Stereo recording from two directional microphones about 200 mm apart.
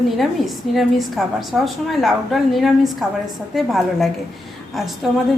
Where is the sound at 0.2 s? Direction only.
Centre (ahead or behind).